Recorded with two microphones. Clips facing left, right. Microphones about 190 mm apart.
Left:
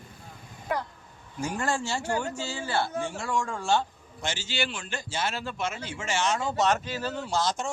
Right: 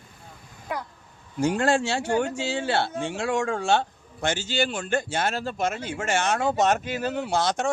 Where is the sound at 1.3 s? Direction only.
70° right (ahead or behind); by 5.8 s 45° right (ahead or behind).